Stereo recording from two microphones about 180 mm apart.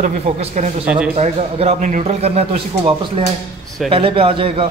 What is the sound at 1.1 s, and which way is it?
A man's voice, 35° right (ahead or behind).